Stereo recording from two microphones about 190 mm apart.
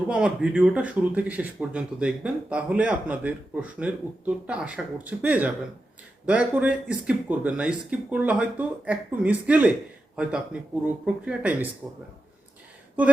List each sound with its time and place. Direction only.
0.1 s speech: 5° right (ahead or behind)